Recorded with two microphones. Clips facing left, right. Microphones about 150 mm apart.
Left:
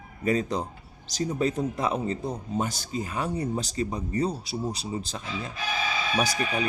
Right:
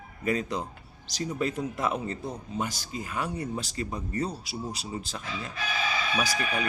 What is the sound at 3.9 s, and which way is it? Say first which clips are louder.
Speech: left 3 dB; 15° left (ahead or behind).